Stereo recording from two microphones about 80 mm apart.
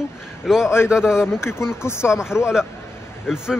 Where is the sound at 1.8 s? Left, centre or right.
Left.